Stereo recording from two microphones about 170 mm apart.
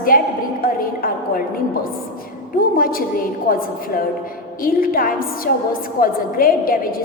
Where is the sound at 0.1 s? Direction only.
55° left (ahead or behind).